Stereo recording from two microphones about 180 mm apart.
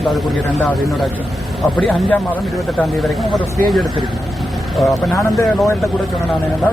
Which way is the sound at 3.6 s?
Centre (ahead or behind).